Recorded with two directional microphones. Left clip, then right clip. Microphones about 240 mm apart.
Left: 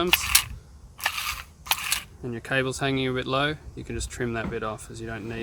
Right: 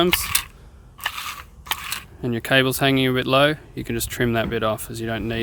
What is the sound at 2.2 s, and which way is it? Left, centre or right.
Speech, right.